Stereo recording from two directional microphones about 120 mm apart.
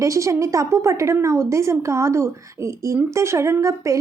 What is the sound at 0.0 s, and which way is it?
A woman's voice, 25° right (ahead or behind).